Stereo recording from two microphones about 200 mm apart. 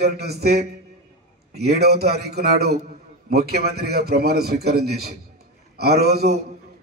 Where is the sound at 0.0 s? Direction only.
50° right (ahead or behind).